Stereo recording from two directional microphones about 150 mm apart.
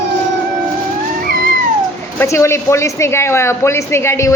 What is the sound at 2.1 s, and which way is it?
Speech, 20° left (ahead or behind).